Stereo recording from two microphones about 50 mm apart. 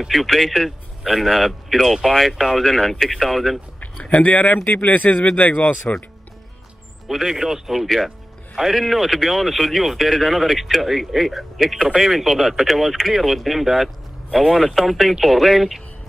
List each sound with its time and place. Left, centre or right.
0.1 s speech: centre
4.1 s speech: left
7.1 s speech: centre